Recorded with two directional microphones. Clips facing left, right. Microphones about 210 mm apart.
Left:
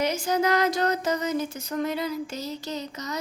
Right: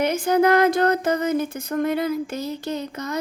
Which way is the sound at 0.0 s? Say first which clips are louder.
Right 6 dB; 55° right (ahead or behind).